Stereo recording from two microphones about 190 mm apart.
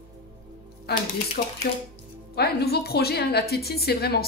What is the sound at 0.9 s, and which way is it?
A woman's voice, 60° left (ahead or behind).